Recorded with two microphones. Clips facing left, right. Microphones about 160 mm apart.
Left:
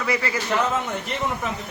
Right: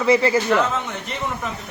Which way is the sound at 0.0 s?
25° right (ahead or behind).